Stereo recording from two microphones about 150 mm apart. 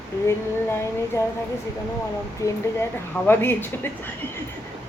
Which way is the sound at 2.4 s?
20° left (ahead or behind).